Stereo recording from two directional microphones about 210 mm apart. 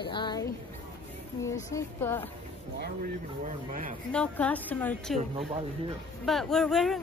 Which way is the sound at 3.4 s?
40° right (ahead or behind).